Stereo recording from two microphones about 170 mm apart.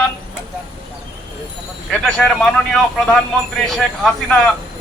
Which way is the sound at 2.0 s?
5° left (ahead or behind).